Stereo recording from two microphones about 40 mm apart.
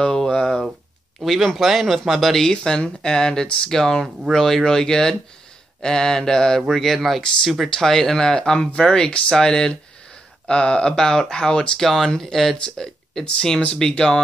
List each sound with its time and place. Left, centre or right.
0.0 s a sound: centre
1.2 s speech: centre
2.5 s speech: centre
11.8 s speech: centre